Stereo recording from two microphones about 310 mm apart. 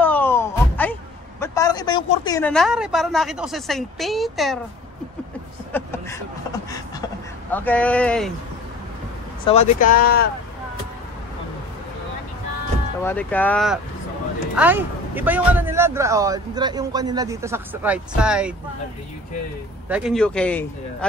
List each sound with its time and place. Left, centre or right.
0.0 s music: centre
1.4 s speech: centre
5.7 s a sound: centre
7.5 s speech: centre
9.5 s speech: left
13.0 s a man's voice: centre
19.9 s speech: centre